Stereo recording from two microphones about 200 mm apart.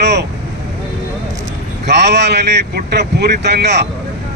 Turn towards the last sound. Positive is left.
turn(degrees=-55)  # may be behind; listen again after turning